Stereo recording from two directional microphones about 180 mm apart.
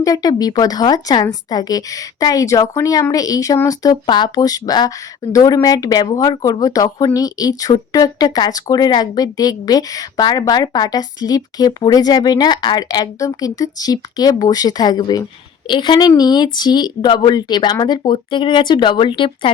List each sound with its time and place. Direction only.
0.0 s speech: 20° left (ahead or behind)